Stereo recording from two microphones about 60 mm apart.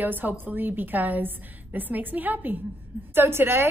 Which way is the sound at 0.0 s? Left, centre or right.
Right.